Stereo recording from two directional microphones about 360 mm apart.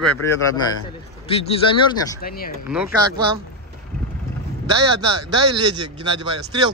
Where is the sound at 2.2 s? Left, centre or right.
Left.